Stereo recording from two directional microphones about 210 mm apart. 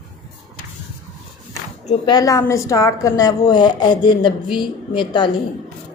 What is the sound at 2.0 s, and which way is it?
A woman's voice, 20° left (ahead or behind).